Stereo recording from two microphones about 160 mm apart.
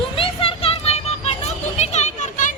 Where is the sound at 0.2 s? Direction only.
35° left (ahead or behind).